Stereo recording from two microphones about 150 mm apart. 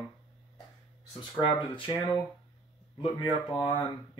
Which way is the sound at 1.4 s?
35° left (ahead or behind).